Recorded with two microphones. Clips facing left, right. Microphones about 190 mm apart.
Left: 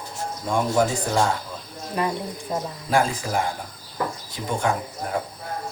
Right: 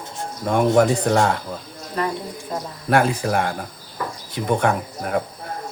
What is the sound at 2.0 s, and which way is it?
Speech, 15° left (ahead or behind).